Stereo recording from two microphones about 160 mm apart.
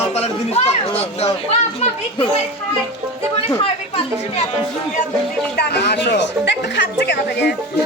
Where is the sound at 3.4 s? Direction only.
35° left (ahead or behind).